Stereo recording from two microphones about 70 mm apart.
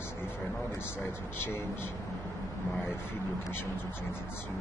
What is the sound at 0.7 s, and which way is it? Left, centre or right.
Speech, left.